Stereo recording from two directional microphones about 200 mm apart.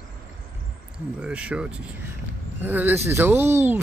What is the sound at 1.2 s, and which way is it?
Speech, 5° right (ahead or behind).